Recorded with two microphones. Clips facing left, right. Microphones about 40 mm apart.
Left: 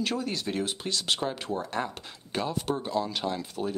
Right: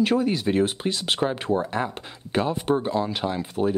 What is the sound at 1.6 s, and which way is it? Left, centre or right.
Speech, centre.